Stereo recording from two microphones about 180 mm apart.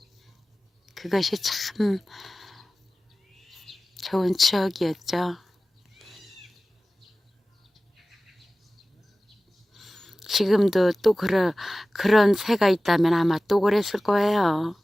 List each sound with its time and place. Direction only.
0.9 s speech: centre (ahead or behind)
3.3 s a sound: centre (ahead or behind)
6.0 s cat: centre (ahead or behind)
9.7 s speech: centre (ahead or behind)